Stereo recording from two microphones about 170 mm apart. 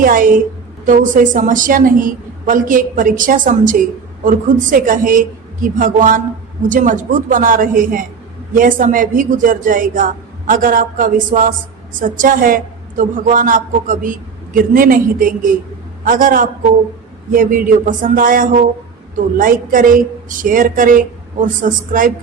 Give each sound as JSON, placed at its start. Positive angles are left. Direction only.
{"t": 0.0, "sound": "a woman's voice", "side_deg": -55}